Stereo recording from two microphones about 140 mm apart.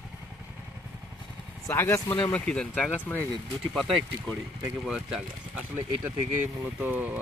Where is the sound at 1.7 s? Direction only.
20° left (ahead or behind).